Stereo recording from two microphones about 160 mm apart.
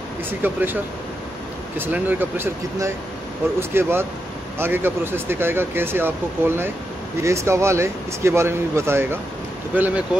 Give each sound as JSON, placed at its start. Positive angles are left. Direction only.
{"t": 0.3, "sound": "speech", "side_deg": -10}
{"t": 1.8, "sound": "speech", "side_deg": -10}